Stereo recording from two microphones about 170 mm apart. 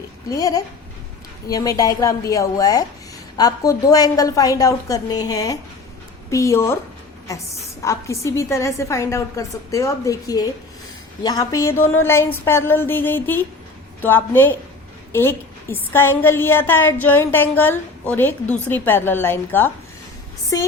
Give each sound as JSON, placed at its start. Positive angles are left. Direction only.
{"t": 0.3, "sound": "a woman's voice", "side_deg": 20}